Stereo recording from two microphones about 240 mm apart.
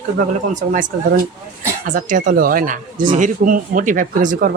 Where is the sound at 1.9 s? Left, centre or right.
Right.